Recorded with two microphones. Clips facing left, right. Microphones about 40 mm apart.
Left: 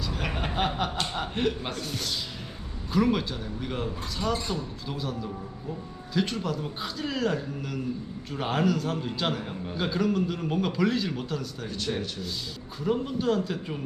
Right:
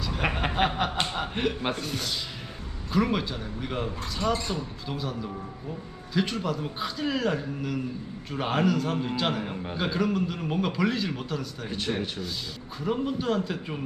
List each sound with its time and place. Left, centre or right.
0.1 s a sound: right
0.3 s chuckle: centre
1.1 s a man's voice: centre
11.7 s speech: centre
12.8 s speech: centre